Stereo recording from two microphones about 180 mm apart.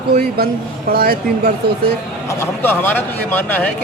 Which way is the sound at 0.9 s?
55° right (ahead or behind).